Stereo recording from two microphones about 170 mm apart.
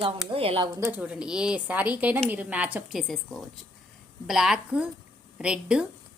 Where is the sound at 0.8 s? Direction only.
10° right (ahead or behind).